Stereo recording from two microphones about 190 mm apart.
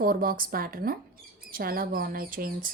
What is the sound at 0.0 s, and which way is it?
Speech, 50° right (ahead or behind).